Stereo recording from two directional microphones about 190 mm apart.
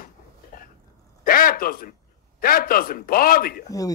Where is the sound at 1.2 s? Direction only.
50° left (ahead or behind).